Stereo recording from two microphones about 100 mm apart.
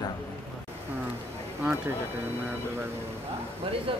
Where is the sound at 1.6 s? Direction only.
20° right (ahead or behind).